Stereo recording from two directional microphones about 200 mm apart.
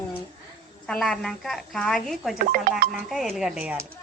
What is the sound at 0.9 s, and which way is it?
A woman's voice, 5° left (ahead or behind).